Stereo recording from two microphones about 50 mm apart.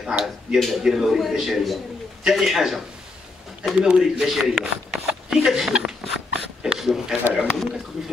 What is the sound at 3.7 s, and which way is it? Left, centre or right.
Speech, centre.